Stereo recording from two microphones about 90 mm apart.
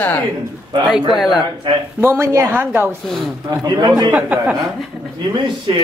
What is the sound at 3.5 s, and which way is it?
Speech, 50° right (ahead or behind).